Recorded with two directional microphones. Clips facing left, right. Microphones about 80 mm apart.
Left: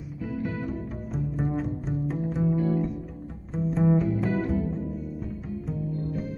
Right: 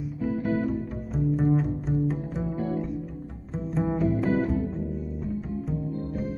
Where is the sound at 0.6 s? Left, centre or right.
Centre.